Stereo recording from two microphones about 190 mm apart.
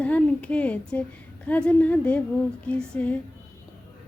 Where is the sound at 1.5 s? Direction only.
5° left (ahead or behind).